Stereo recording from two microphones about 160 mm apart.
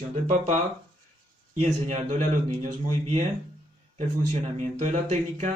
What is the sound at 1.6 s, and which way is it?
Speech, 50° right (ahead or behind).